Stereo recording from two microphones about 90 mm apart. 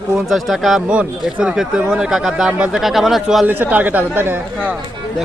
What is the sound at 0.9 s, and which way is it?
Speech, 10° right (ahead or behind).